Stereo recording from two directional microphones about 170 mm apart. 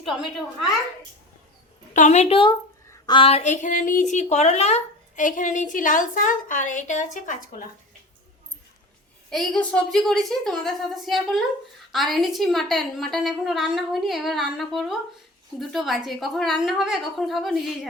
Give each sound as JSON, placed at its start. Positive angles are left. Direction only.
{"t": 1.9, "sound": "a woman's voice", "side_deg": 45}
{"t": 9.3, "sound": "a woman's voice", "side_deg": 5}